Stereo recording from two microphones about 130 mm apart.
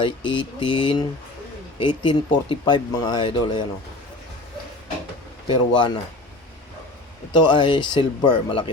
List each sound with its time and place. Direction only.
0.0 s speech: 40° left (ahead or behind)
5.5 s speech: 35° left (ahead or behind)
7.3 s speech: 35° left (ahead or behind)